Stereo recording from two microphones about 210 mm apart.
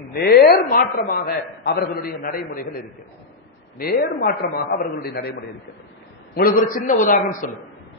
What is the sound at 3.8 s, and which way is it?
A man's voice, 45° left (ahead or behind).